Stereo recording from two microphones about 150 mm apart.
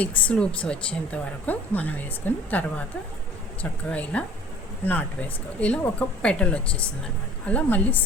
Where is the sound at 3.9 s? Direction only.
10° left (ahead or behind).